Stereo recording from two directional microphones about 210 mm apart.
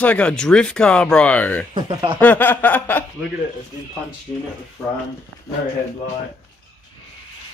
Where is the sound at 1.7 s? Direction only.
25° right (ahead or behind).